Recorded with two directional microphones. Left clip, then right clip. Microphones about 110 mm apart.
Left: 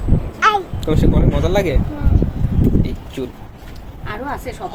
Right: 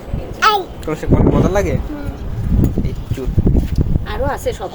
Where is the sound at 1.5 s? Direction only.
30° left (ahead or behind).